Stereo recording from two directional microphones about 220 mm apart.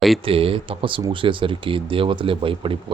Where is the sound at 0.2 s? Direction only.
25° right (ahead or behind).